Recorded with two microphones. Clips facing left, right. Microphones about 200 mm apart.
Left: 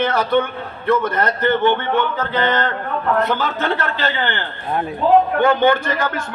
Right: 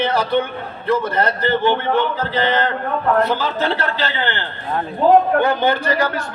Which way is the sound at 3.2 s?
55° left (ahead or behind).